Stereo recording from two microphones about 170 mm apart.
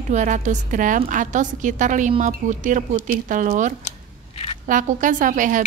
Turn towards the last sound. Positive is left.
turn(degrees=-50)  # may be behind; listen again after turning